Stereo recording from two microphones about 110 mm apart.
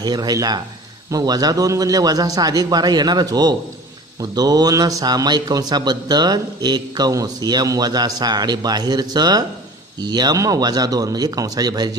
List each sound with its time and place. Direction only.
0.0 s speech: 40° right (ahead or behind)